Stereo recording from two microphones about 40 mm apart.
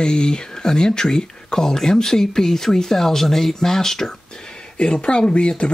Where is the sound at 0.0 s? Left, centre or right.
Centre.